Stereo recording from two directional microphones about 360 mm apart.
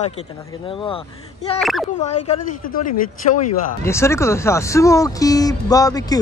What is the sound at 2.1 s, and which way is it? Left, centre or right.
Speech, centre.